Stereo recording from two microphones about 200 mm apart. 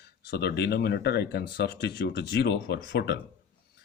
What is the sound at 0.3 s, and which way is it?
Speech, 55° left (ahead or behind).